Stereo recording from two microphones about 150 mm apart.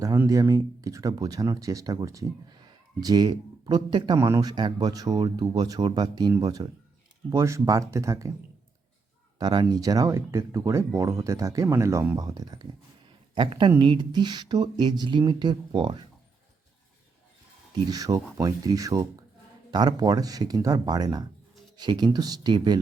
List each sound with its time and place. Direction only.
0.3 s speech: 20° right (ahead or behind)
9.4 s speech: 30° right (ahead or behind)
17.8 s speech: 25° right (ahead or behind)